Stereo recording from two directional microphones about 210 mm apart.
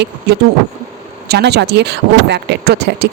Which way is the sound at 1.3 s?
55° right (ahead or behind).